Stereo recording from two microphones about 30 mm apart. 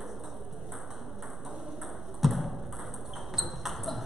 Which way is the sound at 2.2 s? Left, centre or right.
Centre.